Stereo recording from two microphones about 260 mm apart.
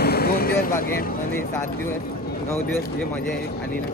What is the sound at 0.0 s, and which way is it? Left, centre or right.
Vehicle, left.